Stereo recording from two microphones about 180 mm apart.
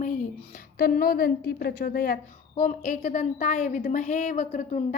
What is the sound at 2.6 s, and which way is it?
A woman's voice, 40° left (ahead or behind).